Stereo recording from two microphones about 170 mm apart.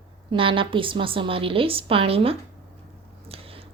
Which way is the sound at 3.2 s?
35° right (ahead or behind).